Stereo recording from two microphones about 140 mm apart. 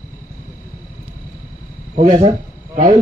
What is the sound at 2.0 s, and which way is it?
Speech, 40° right (ahead or behind).